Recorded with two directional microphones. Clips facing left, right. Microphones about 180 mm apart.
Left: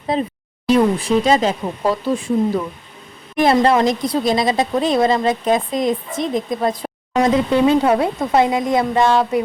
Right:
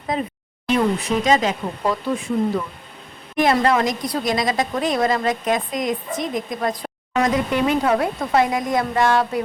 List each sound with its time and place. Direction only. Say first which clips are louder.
0.1 s a woman's voice: left 4 dB; 30° left (ahead or behind)
3.4 s a woman's voice: left 4 dB; 30° left (ahead or behind)